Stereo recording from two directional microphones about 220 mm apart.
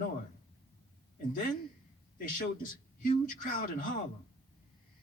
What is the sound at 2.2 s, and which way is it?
A man's voice, 35° left (ahead or behind).